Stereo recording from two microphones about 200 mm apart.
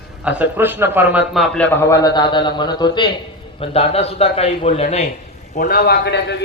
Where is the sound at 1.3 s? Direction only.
5° left (ahead or behind); by 5.0 s 30° left (ahead or behind).